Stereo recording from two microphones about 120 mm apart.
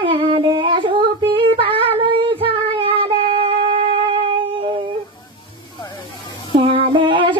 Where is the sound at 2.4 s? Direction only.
50° right (ahead or behind).